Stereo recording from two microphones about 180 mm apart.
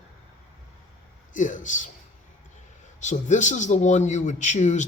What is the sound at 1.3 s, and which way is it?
Speech, 45° left (ahead or behind).